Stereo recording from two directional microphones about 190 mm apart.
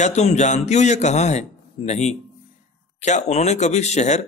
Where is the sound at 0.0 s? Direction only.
35° left (ahead or behind).